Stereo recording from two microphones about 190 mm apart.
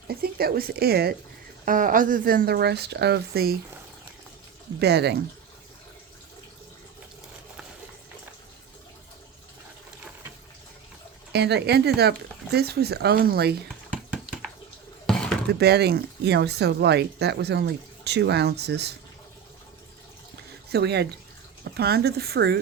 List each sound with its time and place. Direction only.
0.1 s speech: 55° right (ahead or behind)
1.6 s speech: 45° right (ahead or behind)
4.8 s speech: 60° right (ahead or behind)
11.3 s speech: 60° right (ahead or behind)
15.0 s a sound: 5° left (ahead or behind)
15.4 s speech: 60° right (ahead or behind)
20.3 s a sound: 60° right (ahead or behind)
21.6 s speech: 55° right (ahead or behind)